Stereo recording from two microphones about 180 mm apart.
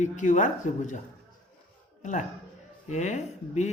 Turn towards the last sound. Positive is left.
turn(degrees=40)  # may be behind; listen again after turning